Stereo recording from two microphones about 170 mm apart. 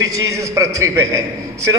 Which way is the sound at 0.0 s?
20° right (ahead or behind).